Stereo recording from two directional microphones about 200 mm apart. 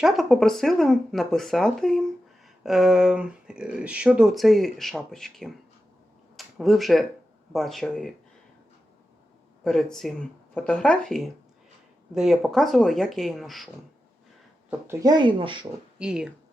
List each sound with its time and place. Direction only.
0.0 s speech: centre (ahead or behind)
6.3 s a sound: centre (ahead or behind)
7.5 s speech: centre (ahead or behind)
9.6 s speech: centre (ahead or behind)
14.7 s speech: 15° right (ahead or behind)
16.0 s speech: 5° right (ahead or behind)